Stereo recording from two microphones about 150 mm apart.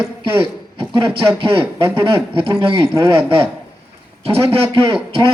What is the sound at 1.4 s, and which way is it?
A man's voice, 35° right (ahead or behind).